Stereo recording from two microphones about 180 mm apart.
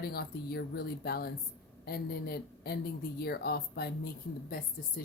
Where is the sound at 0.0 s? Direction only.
60° left (ahead or behind).